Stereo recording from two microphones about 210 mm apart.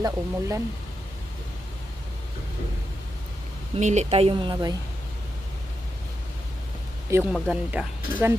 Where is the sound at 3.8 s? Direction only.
35° right (ahead or behind).